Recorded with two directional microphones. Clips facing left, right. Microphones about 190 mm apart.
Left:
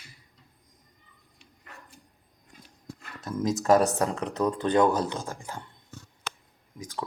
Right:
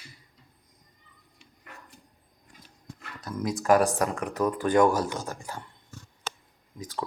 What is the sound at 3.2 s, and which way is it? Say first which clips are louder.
Speech: left 3 dB; 25° left (ahead or behind).